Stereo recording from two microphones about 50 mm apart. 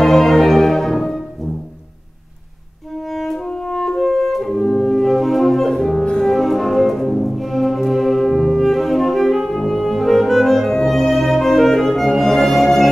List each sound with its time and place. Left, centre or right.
0.0 s music: centre
3.1 s music: centre